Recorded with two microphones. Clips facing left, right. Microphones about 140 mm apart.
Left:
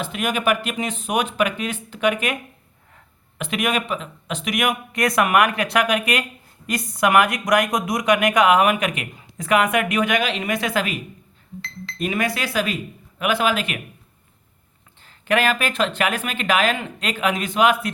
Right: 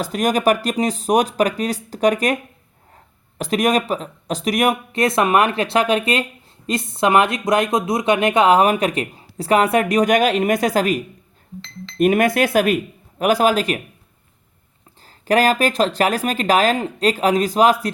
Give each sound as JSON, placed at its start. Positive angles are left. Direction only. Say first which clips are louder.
{"t": 0.0, "sound": "speech", "louder": "right 5 dB", "side_deg": -40}
{"t": 15.0, "sound": "speech", "louder": "right 4 dB", "side_deg": -35}